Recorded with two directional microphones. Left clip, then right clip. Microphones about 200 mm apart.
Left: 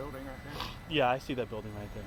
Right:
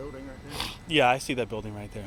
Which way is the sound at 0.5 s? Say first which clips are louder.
Right 7 dB; 50° right (ahead or behind).